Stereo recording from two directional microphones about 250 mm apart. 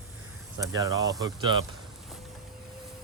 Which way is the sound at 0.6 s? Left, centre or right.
Centre.